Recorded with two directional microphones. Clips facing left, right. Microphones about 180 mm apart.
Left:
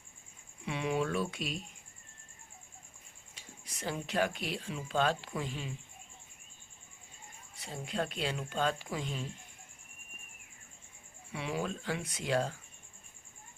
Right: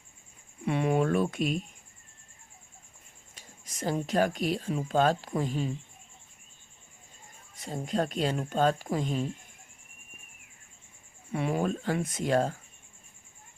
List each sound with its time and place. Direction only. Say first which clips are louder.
0.6 s a sound: right 7 dB; 50° right (ahead or behind)
3.3 s speech: right 6 dB; 45° right (ahead or behind)
7.5 s speech: right 7 dB; 45° right (ahead or behind)
11.3 s speech: right 7 dB; 50° right (ahead or behind)